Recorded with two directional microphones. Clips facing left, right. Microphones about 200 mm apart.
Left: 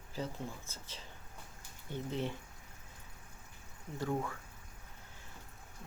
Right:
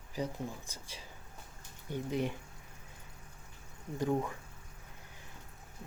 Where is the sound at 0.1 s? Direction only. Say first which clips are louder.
Right 3 dB; 15° right (ahead or behind).